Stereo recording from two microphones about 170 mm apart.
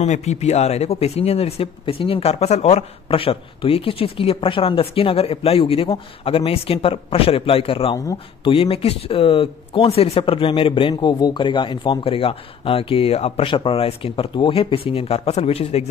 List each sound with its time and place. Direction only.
0.0 s speech: 40° left (ahead or behind)